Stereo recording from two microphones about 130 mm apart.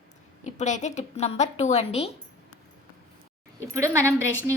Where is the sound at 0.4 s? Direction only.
65° left (ahead or behind).